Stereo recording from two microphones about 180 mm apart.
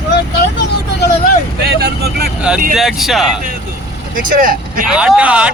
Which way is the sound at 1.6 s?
60° right (ahead or behind).